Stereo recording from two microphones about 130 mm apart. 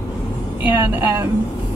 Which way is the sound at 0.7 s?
15° right (ahead or behind).